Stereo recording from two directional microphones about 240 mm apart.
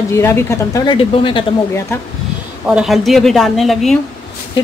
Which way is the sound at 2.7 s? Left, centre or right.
Centre.